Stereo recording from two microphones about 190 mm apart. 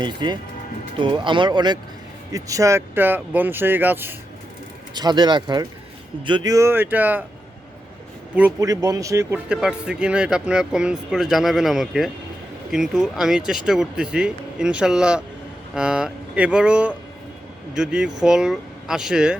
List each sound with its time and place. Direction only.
0.0 s speech: 25° right (ahead or behind)
4.9 s speech: 20° right (ahead or behind)
8.4 s a man's voice: 15° right (ahead or behind)